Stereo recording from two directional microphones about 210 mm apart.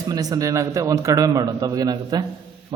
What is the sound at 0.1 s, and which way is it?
Speech, 15° right (ahead or behind).